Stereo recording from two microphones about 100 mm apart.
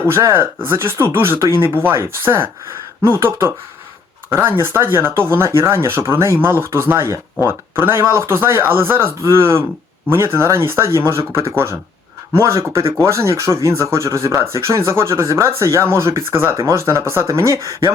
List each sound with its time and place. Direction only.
0.1 s speech: 25° right (ahead or behind)